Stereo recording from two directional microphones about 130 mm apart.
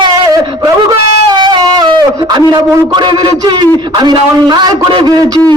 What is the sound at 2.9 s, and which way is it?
A man's voice, 35° right (ahead or behind).